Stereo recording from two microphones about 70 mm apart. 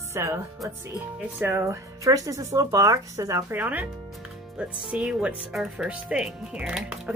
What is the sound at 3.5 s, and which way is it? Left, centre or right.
Speech, right.